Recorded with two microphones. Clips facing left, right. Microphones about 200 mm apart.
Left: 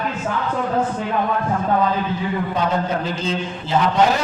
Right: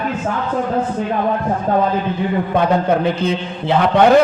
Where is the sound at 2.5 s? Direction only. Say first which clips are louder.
Right 8 dB; 60° right (ahead or behind).